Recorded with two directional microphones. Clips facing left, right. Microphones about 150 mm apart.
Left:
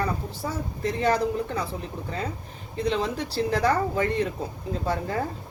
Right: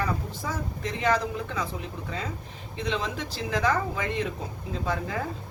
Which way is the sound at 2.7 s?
35° left (ahead or behind).